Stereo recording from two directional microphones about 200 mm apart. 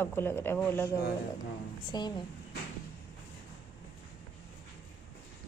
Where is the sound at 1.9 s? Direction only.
20° left (ahead or behind).